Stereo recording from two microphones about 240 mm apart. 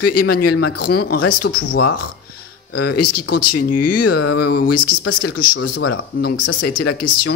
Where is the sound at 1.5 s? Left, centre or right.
Left.